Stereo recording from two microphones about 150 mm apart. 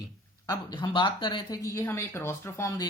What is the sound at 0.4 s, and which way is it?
Speech, 30° left (ahead or behind).